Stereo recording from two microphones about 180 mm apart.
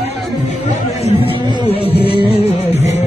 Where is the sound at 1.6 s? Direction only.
30° left (ahead or behind).